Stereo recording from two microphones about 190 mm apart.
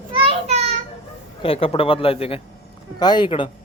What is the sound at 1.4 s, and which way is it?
A man's voice, 30° left (ahead or behind).